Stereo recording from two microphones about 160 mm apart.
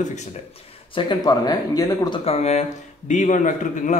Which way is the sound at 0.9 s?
25° left (ahead or behind).